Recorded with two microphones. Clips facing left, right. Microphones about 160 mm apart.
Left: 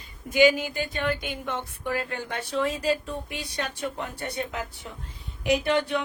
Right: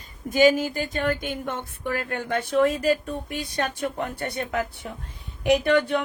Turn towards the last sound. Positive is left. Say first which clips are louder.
# right 4 dB
turn(degrees=-50)  # may be behind; listen again after turning